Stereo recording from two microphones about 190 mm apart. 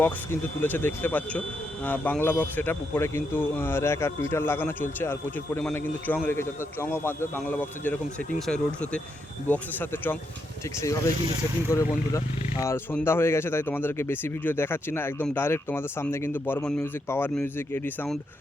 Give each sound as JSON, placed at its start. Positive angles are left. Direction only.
{"t": 0.0, "sound": "speech", "side_deg": 10}
{"t": 11.7, "sound": "speech", "side_deg": 15}